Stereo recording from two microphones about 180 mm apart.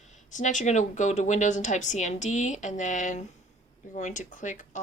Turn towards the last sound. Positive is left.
turn(degrees=45)  # may be behind; listen again after turning